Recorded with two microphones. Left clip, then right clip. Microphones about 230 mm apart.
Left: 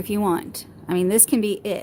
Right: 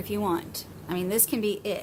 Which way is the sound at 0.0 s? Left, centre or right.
Left.